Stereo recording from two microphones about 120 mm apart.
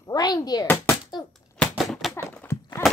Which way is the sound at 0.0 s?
35° left (ahead or behind).